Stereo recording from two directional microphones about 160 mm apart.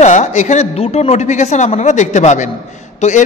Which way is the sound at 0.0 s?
45° left (ahead or behind).